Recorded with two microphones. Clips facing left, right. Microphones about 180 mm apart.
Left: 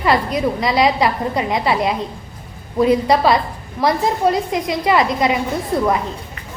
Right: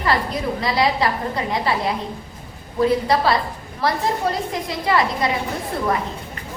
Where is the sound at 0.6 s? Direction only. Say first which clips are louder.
Left 3 dB; 20° left (ahead or behind).